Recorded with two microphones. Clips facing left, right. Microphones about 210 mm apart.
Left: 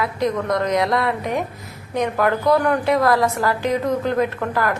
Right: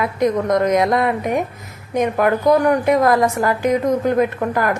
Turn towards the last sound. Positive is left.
turn(degrees=-20)  # may be behind; listen again after turning